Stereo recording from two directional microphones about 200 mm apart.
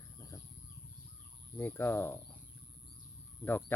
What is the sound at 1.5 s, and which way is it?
Speech, 10° left (ahead or behind).